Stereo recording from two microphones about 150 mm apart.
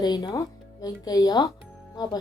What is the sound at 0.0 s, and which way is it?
Speech, 25° left (ahead or behind).